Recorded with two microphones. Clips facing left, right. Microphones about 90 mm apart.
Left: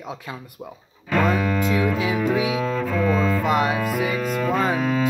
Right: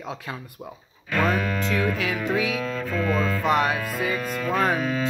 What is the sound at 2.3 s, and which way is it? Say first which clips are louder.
Cello: left 3 dB; 20° left (ahead or behind).